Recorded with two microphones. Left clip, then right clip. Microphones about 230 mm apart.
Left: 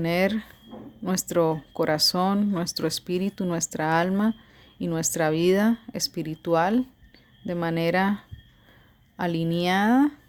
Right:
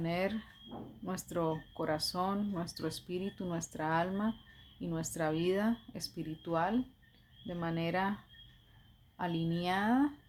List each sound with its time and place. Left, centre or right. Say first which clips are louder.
0.0 s speech: left 11 dB; left